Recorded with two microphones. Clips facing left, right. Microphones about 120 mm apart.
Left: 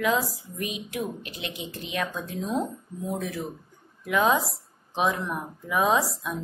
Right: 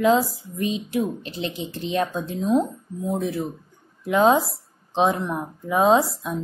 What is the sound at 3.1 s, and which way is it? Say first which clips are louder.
Speech: right 6 dB; 25° right (ahead or behind).